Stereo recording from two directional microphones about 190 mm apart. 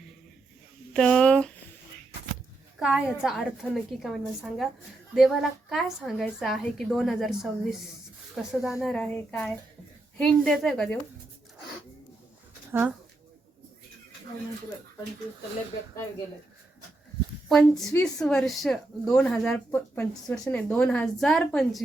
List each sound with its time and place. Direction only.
0.9 s speech: 5° left (ahead or behind)
2.7 s a woman's voice: 5° right (ahead or behind)
17.5 s speech: centre (ahead or behind)